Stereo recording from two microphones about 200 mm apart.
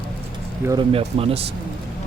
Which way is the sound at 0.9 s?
30° right (ahead or behind).